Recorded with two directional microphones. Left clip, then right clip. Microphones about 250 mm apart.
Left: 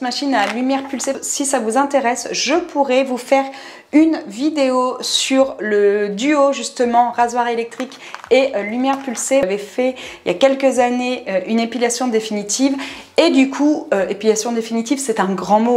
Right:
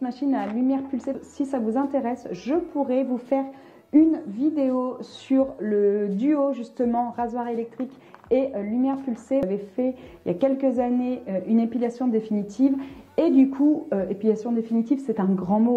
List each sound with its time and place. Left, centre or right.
0.0 s speech: centre
1.6 s speech: centre
3.9 s speech: centre